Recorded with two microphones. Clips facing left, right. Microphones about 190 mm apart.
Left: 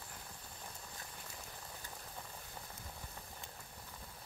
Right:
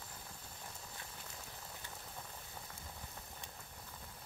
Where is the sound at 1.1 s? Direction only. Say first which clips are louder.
Left 1 dB; centre (ahead or behind).